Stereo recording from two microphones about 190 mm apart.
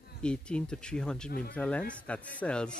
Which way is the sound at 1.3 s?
50° left (ahead or behind).